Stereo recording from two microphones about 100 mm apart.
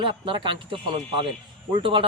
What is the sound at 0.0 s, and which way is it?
Speech, 55° right (ahead or behind).